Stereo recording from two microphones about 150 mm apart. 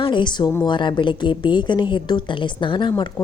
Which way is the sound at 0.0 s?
30° left (ahead or behind).